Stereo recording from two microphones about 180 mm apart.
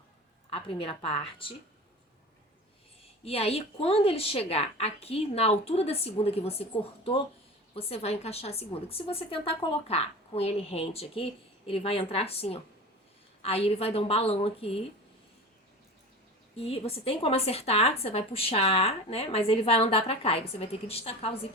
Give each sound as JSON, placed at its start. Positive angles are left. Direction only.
{"t": 0.5, "sound": "a woman's voice", "side_deg": 30}
{"t": 3.2, "sound": "a woman's voice", "side_deg": 35}
{"t": 16.6, "sound": "a woman's voice", "side_deg": 30}